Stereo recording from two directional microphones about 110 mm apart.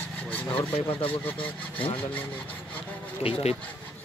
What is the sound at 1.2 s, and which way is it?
Speech, 15° left (ahead or behind).